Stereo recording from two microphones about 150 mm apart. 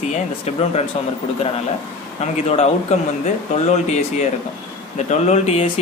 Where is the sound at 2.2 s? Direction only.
45° left (ahead or behind).